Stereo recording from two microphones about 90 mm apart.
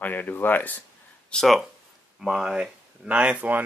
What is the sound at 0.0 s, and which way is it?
Speech, 20° left (ahead or behind).